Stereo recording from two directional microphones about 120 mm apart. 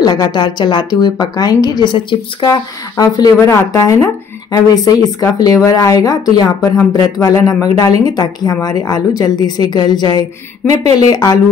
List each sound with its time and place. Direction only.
0.0 s speech: 35° left (ahead or behind)
3.0 s speech: 30° left (ahead or behind)
10.7 s speech: 65° right (ahead or behind)
11.1 s speech: 25° left (ahead or behind)